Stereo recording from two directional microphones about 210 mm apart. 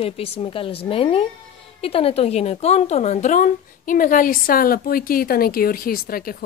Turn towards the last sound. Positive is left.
turn(degrees=45)  # may be behind; listen again after turning